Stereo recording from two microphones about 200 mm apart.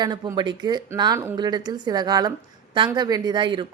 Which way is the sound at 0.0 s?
20° right (ahead or behind).